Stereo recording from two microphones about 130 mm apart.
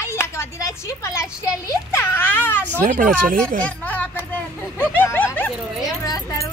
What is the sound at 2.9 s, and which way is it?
Speech, 90° right.